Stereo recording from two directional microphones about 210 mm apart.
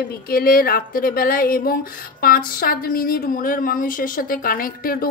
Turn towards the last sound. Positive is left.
turn(degrees=45)  # may be behind; listen again after turning